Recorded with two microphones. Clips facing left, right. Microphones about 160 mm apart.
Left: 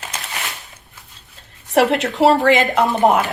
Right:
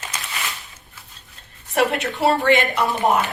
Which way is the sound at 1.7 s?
80° left.